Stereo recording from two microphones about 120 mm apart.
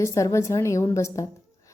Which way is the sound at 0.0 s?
25° left (ahead or behind).